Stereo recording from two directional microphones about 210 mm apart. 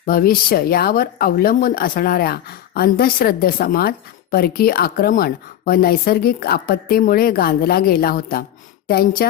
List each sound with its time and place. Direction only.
0.0 s speech: 45° left (ahead or behind)